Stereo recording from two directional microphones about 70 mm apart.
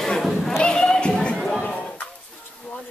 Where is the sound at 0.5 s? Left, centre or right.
Centre.